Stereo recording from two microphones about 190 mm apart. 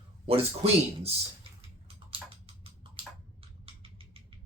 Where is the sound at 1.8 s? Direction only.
30° right (ahead or behind).